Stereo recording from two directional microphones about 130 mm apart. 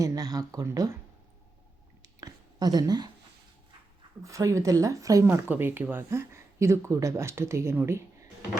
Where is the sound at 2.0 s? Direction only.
30° right (ahead or behind).